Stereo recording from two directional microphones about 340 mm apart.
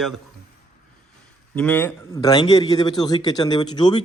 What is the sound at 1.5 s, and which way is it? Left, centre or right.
Speech, centre.